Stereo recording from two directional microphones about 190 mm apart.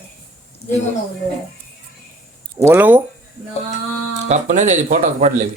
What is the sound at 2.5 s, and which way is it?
Speech, 10° right (ahead or behind).